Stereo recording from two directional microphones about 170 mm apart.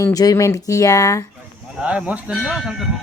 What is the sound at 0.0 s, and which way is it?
Speech, 20° left (ahead or behind).